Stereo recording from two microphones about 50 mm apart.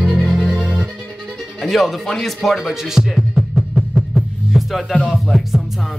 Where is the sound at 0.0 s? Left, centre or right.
Right.